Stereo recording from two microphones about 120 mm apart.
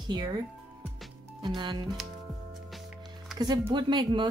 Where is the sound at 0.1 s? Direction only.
35° right (ahead or behind).